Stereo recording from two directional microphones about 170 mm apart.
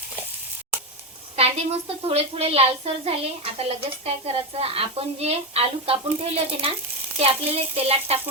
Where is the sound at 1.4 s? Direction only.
35° right (ahead or behind).